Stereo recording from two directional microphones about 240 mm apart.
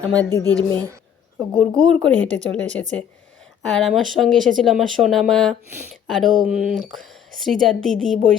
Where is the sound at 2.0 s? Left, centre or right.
Centre.